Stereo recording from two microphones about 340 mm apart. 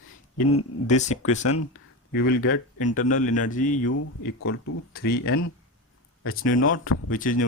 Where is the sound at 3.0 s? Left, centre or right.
Left.